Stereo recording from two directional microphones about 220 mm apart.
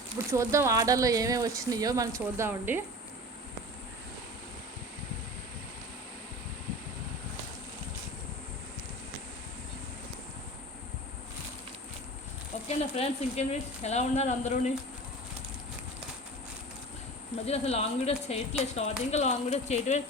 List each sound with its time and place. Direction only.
0.3 s speech: 15° right (ahead or behind)
12.6 s speech: 30° left (ahead or behind)
17.4 s speech: 30° left (ahead or behind)